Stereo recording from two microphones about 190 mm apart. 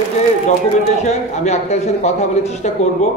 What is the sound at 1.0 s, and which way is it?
A man's voice, 35° left (ahead or behind).